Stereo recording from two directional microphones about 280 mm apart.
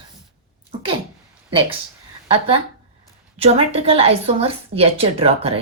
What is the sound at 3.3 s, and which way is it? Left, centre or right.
Speech, right.